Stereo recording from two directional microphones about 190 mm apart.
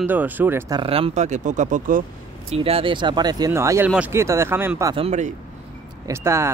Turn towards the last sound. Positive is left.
turn(degrees=-15)  # may be behind; listen again after turning